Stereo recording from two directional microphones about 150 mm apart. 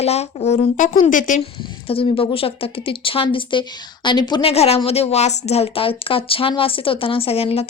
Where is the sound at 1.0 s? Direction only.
60° left (ahead or behind).